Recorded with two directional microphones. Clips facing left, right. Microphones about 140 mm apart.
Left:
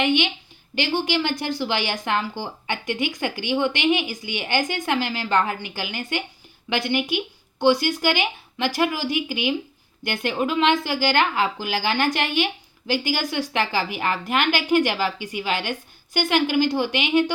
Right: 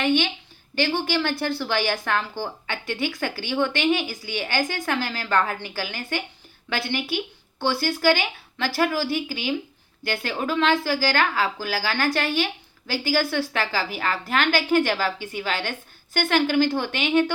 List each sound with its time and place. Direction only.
0.0 s a woman's voice: 15° left (ahead or behind)